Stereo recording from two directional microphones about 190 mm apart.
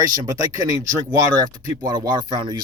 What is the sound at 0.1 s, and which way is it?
Speech, 20° right (ahead or behind).